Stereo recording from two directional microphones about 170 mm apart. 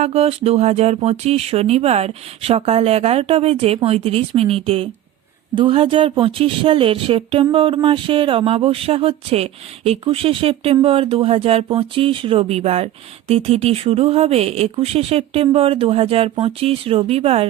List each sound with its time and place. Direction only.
0.0 s speech: 40° right (ahead or behind)